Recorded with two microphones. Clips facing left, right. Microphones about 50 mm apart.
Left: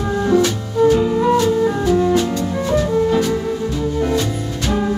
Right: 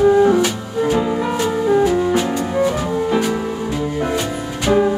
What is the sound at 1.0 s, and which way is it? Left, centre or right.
Music, right.